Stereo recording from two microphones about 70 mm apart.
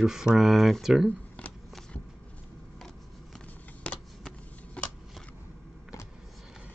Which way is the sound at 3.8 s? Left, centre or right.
Centre.